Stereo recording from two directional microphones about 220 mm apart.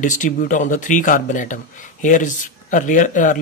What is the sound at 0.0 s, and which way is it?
Speech, 35° left (ahead or behind).